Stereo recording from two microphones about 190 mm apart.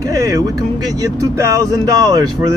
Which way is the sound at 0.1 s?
15° right (ahead or behind).